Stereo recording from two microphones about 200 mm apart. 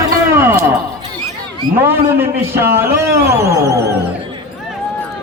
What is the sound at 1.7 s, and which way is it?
A man's voice, 10° right (ahead or behind).